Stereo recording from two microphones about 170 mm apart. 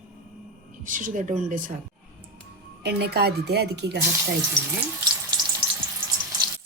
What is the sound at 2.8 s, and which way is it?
Speech, 70° right (ahead or behind).